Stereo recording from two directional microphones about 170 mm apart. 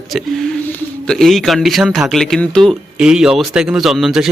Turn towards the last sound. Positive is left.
turn(degrees=0)  # may be behind; listen again after turning